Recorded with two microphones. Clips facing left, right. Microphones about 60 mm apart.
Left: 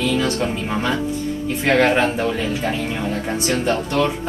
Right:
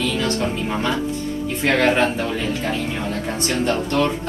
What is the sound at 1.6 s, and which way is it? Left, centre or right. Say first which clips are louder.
Speech: left 1 dB; centre.